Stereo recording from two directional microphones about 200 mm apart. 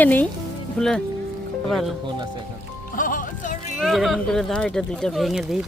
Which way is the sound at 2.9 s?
40° left (ahead or behind).